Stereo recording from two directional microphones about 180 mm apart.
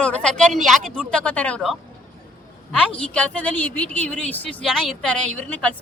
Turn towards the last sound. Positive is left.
turn(degrees=5)  # may be behind; listen again after turning